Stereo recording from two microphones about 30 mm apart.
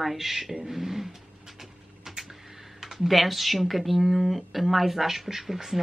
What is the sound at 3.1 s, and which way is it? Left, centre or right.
Speech, centre.